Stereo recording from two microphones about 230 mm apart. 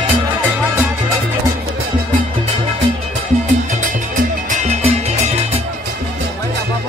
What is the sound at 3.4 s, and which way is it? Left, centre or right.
Music, right.